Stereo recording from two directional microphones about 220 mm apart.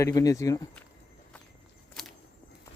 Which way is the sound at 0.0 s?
15° left (ahead or behind).